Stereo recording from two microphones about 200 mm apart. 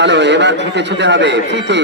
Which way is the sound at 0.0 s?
60° right (ahead or behind).